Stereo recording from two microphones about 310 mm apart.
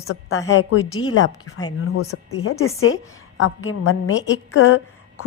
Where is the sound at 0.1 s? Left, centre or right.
Left.